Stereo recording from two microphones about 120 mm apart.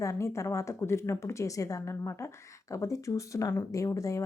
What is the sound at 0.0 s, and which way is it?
A woman's voice, 25° left (ahead or behind).